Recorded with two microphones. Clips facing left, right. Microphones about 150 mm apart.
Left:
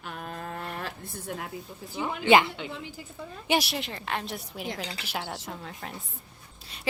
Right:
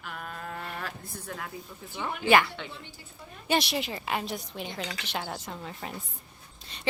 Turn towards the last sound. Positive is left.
turn(degrees=5)  # may be behind; listen again after turning